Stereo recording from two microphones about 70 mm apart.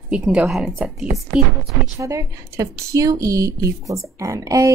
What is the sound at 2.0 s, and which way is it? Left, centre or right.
A woman's voice, right.